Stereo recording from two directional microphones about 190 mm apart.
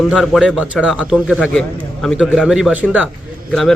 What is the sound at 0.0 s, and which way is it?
Speech, centre (ahead or behind).